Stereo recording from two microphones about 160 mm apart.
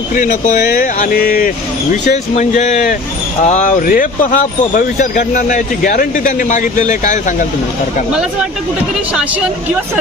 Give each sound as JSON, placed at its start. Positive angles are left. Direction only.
{"t": 0.1, "sound": "speech", "side_deg": 55}